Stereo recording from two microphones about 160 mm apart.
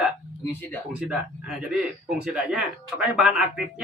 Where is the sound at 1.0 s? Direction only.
5° right (ahead or behind).